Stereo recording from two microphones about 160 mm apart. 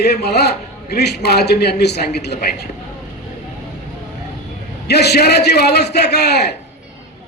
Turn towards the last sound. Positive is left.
turn(degrees=90)